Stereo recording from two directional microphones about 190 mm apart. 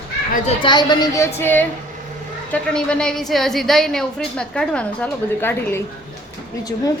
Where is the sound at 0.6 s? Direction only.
25° left (ahead or behind).